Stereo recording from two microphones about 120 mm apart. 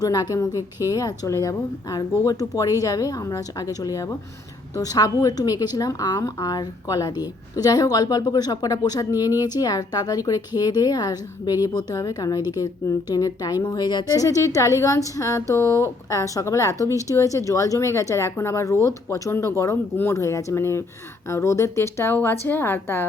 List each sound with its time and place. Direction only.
0.0 s a woman's voice: 35° left (ahead or behind)